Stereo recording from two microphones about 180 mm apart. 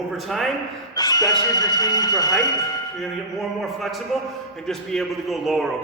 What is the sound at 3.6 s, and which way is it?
A man's voice, centre (ahead or behind).